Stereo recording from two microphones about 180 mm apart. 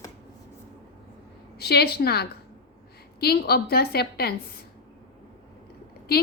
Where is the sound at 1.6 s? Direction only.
60° left (ahead or behind).